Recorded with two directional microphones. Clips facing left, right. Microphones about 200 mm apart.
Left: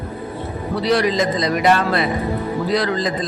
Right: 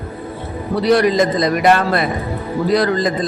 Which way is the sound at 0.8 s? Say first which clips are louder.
Right 4 dB; 50° right (ahead or behind).